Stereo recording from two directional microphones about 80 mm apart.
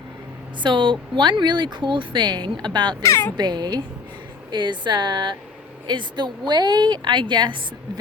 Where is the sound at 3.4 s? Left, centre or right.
Right.